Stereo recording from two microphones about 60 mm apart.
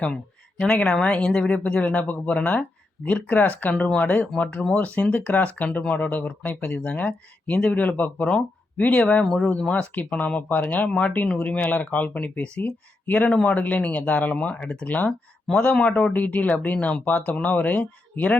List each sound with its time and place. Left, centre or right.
0.6 s speech: centre
9.0 s speech: centre; by 18.3 s left